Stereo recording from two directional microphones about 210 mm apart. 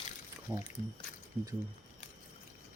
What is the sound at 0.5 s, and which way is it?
Speech, 5° right (ahead or behind).